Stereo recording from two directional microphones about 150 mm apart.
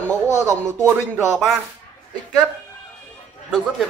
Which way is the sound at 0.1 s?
20° right (ahead or behind).